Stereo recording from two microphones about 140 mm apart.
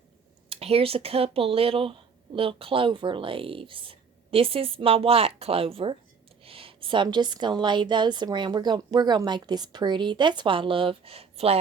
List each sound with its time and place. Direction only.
0.5 s speech: 45° right (ahead or behind)